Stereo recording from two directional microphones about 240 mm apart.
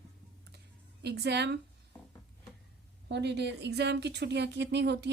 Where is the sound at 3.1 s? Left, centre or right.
Right.